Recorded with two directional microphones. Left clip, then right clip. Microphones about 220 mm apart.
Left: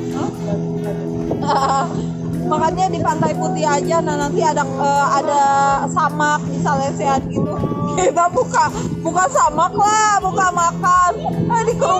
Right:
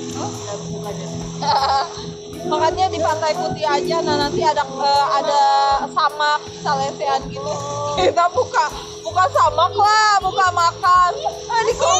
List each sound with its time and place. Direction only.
1.5 s speech: 15° left (ahead or behind)